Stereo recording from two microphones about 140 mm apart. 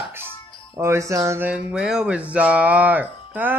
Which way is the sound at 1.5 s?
5° right (ahead or behind).